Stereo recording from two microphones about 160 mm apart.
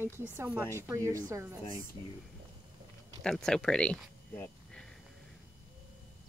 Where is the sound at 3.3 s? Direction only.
5° left (ahead or behind).